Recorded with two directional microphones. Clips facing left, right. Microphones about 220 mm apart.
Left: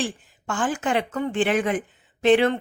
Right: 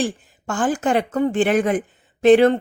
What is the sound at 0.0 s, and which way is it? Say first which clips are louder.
A woman's voice: right 5 dB; 40° right (ahead or behind).